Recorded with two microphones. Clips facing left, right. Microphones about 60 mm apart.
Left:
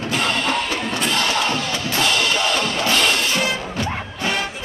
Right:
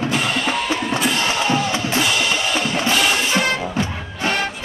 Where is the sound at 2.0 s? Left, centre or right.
Centre.